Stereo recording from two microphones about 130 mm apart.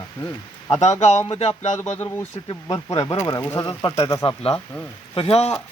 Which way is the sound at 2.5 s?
30° left (ahead or behind).